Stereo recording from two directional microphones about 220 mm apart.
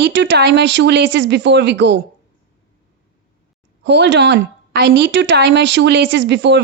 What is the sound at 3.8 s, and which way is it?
A woman's voice, 50° right (ahead or behind).